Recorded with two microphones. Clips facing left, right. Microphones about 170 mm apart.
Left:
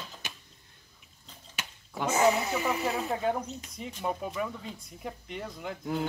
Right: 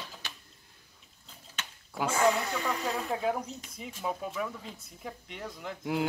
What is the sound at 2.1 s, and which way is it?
Speech, 10° left (ahead or behind).